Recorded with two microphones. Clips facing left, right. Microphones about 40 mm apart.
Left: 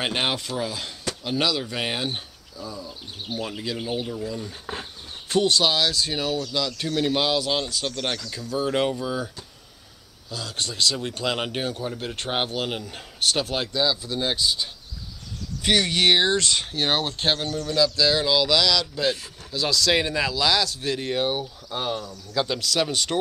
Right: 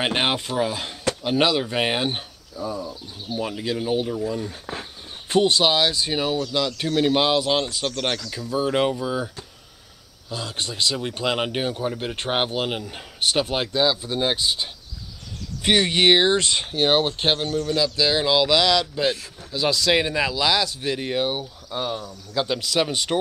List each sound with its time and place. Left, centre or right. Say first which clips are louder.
0.0 s speech: right 3 dB; centre
3.8 s speech: right 6 dB; centre
5.3 s speech: right 2 dB; centre
22.3 s speech: right 1 dB; centre